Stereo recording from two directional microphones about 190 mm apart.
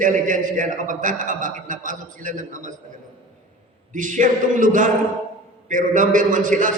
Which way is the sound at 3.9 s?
40° right (ahead or behind).